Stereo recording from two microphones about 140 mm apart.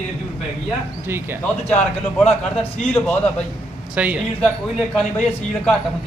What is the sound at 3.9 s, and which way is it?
Speech, 10° right (ahead or behind).